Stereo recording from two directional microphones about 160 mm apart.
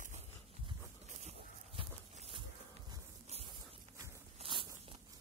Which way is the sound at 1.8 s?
35° right (ahead or behind).